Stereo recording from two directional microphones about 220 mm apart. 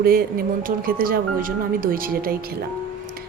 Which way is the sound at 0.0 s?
40° right (ahead or behind).